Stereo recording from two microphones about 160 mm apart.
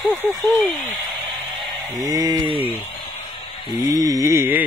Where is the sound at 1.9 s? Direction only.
25° right (ahead or behind).